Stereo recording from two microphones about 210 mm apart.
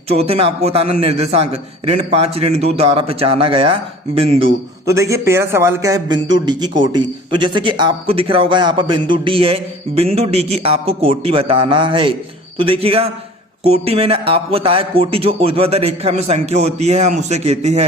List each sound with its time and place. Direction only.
0.1 s speech: 30° right (ahead or behind)
4.9 s a man's voice: 15° right (ahead or behind); by 17.8 s 30° right (ahead or behind)